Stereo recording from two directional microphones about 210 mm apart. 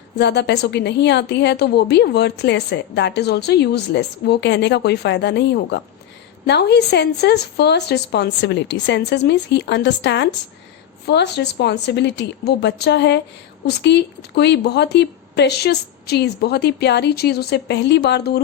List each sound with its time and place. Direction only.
0.2 s a woman's voice: 55° left (ahead or behind)